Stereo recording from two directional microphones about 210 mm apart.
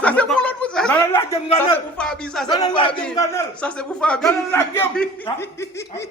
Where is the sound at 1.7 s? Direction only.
5° left (ahead or behind).